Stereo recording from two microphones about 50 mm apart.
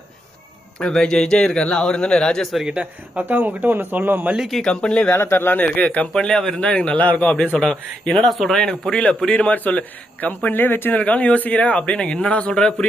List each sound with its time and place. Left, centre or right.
0.8 s a man's voice: centre
2.4 s a man's voice: centre
2.6 s speech: right
3.2 s speech: right
4.7 s a man's voice: left
5.1 s speech: left
5.5 s a man's voice: left
6.1 s a man's voice: centre
6.9 s a man's voice: left; by 8.3 s centre
8.3 s a man's voice: centre
8.8 s a man's voice: centre; by 10.9 s left
10.9 s a man's voice: left